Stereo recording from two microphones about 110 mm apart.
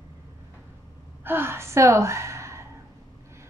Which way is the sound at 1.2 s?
20° right (ahead or behind).